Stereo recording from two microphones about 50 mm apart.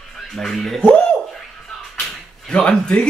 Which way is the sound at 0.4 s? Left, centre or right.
Centre.